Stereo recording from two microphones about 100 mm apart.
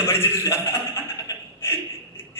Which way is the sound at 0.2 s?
25° left (ahead or behind).